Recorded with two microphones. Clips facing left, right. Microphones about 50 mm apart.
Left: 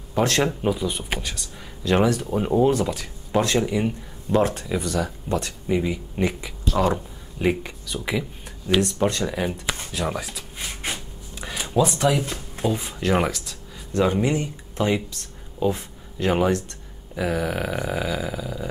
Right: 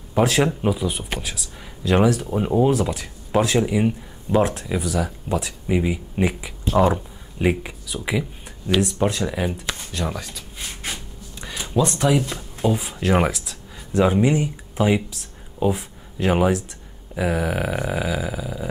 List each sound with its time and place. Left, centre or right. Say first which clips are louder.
0.1 s speech: right 2 dB; centre
6.6 s a sound: right 4 dB; right
6.9 s speech: right 1 dB; centre
9.9 s speech: left 1 dB; centre